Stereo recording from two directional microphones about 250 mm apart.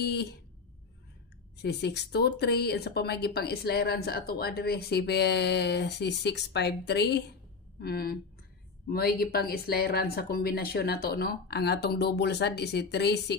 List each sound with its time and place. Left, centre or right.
0.0 s speech: left
1.6 s speech: left